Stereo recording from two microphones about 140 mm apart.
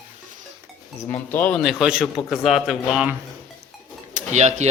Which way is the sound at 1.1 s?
15° left (ahead or behind).